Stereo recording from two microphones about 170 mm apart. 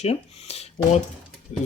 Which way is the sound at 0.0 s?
40° left (ahead or behind).